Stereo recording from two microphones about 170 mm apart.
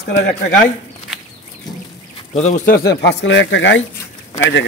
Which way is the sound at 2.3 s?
40° left (ahead or behind).